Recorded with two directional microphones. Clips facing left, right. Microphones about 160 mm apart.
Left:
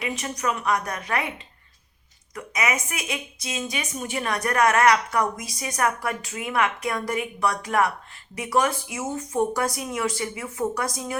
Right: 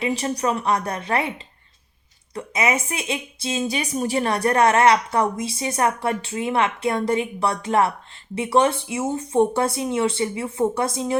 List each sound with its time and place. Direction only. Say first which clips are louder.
0.0 s speech: right 5 dB; 30° right (ahead or behind)
2.3 s speech: right 4 dB; 30° right (ahead or behind)